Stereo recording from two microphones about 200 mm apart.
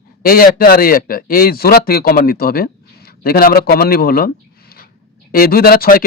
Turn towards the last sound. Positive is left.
turn(degrees=45)  # may be behind; listen again after turning